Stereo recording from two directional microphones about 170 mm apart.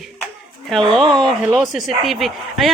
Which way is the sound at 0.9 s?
Centre (ahead or behind).